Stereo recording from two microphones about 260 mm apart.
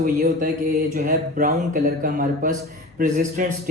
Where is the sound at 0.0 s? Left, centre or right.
Right.